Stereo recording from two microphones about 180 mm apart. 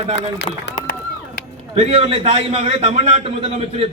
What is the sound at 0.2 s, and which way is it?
Speech, 75° left (ahead or behind).